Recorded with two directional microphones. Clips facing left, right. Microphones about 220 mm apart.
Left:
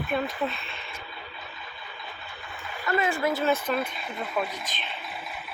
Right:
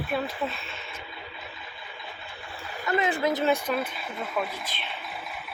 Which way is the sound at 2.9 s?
20° right (ahead or behind).